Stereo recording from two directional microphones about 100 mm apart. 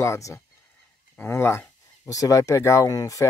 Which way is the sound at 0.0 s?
30° left (ahead or behind).